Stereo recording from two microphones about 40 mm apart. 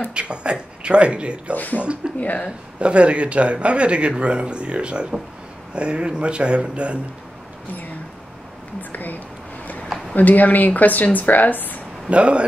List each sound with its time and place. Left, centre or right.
0.1 s speech: right
1.5 s speech: left
1.8 s speech: right
2.1 s speech: left
2.8 s speech: right
8.9 s speech: left
12.1 s speech: right